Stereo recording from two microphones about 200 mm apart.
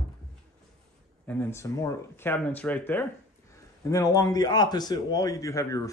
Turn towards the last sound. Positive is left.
turn(degrees=15)  # may be behind; listen again after turning